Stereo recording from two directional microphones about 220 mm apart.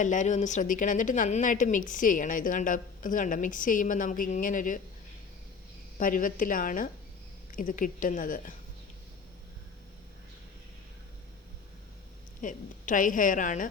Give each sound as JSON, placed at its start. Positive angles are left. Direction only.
{"t": 0.0, "sound": "a woman's voice", "side_deg": 35}
{"t": 6.0, "sound": "a woman's voice", "side_deg": 40}
{"t": 12.4, "sound": "a woman's voice", "side_deg": 35}